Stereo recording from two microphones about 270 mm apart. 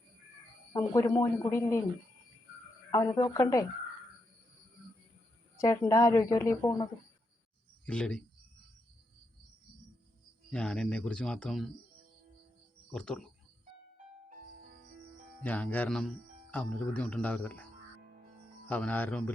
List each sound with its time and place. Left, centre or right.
0.7 s a woman's voice: centre
2.9 s a woman's voice: centre
5.5 s a woman's voice: centre
7.9 s speech: centre
10.5 s speech: centre
12.9 s speech: centre
14.3 s music: right
15.4 s speech: centre
18.7 s speech: centre